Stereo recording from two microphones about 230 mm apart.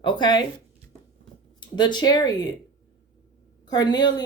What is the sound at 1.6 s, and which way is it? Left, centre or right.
Speech, centre.